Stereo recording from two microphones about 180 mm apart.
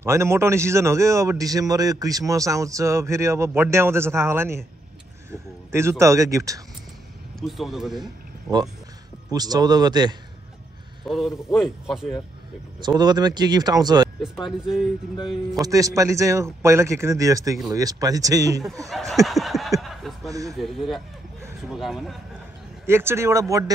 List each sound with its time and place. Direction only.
0.0 s a man's voice: 15° right (ahead or behind)
7.3 s speech: centre (ahead or behind)
9.3 s speech: 20° right (ahead or behind)
11.1 s speech: centre (ahead or behind)
12.8 s speech: 25° right (ahead or behind)
14.4 s speech: 5° right (ahead or behind)
15.6 s a man's voice: 20° right (ahead or behind)
18.9 s snicker: centre (ahead or behind)
19.8 s chuckle: centre (ahead or behind)
20.5 s speech: centre (ahead or behind)
22.8 s a man's voice: 15° right (ahead or behind)